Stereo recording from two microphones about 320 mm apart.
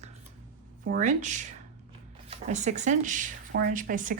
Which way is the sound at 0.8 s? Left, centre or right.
Right.